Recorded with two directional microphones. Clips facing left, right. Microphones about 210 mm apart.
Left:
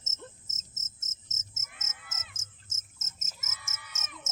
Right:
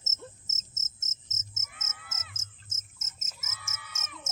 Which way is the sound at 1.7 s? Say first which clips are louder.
Even; 5° right (ahead or behind).